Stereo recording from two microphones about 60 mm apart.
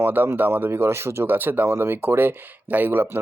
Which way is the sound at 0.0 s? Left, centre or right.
Right.